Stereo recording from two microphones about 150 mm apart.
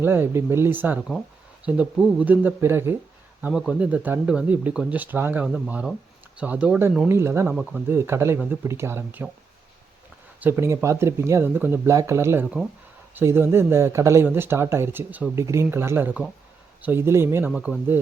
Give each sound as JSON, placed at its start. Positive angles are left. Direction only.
{"t": 0.0, "sound": "speech", "side_deg": -15}
{"t": 10.4, "sound": "speech", "side_deg": -15}